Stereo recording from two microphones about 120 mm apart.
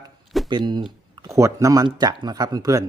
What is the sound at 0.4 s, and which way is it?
Speech, 40° right (ahead or behind).